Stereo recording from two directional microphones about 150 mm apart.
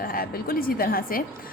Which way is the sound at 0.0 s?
75° left (ahead or behind).